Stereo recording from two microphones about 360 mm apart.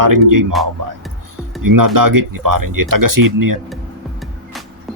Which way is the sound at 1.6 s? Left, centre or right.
Right.